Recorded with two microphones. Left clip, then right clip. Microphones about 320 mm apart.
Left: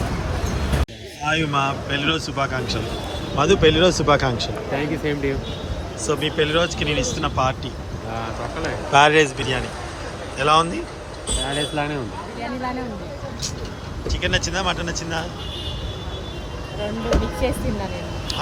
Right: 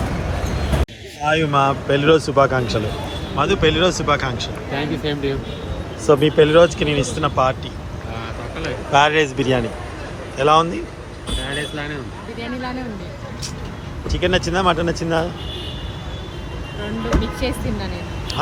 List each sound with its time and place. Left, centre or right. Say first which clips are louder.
1.2 s a man's voice: right 4 dB; centre
8.6 s a man's voice: even; centre
14.1 s a man's voice: right 4 dB; centre
17.4 s a man's voice: left 3 dB; centre